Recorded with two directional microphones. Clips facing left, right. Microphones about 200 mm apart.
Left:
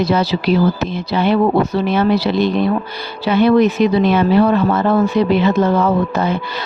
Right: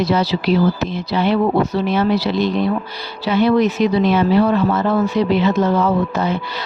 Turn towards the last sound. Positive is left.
turn(degrees=55)  # may be behind; listen again after turning